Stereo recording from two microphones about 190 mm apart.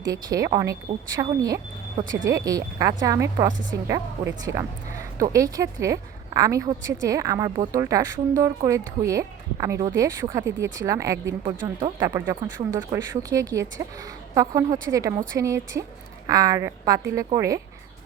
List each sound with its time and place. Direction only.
0.1 s a woman's voice: 20° right (ahead or behind)